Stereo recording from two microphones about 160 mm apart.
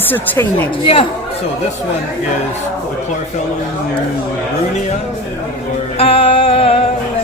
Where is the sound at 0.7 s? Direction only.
35° left (ahead or behind).